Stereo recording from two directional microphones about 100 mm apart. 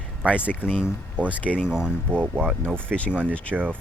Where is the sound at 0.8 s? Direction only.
15° right (ahead or behind).